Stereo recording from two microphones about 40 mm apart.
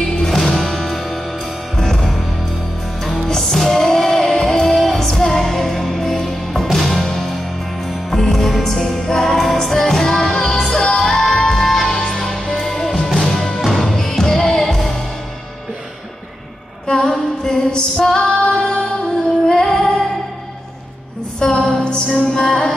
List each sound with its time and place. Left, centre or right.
0.1 s music: centre
17.0 s music: centre
18.0 s female singing: centre
18.5 s music: centre
19.4 s female singing: centre
21.4 s a sound: centre
22.3 s music: centre